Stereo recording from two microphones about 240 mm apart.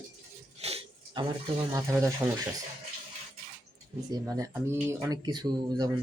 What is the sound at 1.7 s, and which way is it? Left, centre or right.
Speech, centre.